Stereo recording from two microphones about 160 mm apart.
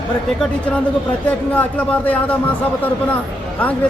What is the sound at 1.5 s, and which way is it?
Speech, 10° left (ahead or behind).